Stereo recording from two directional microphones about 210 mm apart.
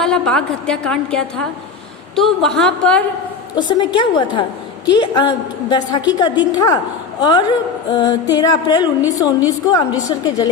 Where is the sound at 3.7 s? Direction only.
20° left (ahead or behind).